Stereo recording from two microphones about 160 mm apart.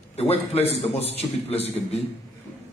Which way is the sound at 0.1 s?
40° left (ahead or behind).